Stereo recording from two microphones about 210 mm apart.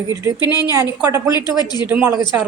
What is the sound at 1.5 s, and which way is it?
Speech, 20° left (ahead or behind).